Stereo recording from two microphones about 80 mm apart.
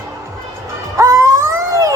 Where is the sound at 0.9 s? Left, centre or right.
Right.